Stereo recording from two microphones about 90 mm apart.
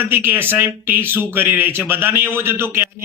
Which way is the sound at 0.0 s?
25° right (ahead or behind).